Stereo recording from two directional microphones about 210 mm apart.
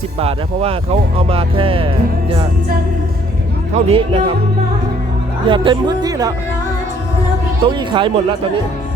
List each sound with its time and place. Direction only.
0.2 s speech: 25° right (ahead or behind)
3.7 s speech: 30° right (ahead or behind)
5.5 s speech: 20° right (ahead or behind)
7.8 s speech: 25° right (ahead or behind)